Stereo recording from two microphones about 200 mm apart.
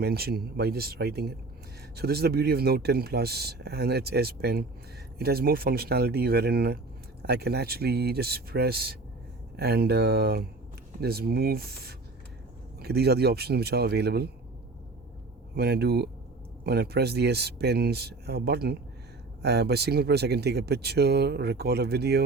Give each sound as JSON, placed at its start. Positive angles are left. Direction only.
{"t": 0.0, "sound": "speech", "side_deg": -50}
{"t": 15.5, "sound": "speech", "side_deg": -55}